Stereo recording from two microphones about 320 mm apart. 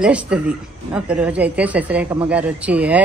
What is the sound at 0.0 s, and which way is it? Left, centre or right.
Speech, centre.